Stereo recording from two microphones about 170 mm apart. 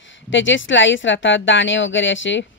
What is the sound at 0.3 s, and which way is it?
Speech, 90° left.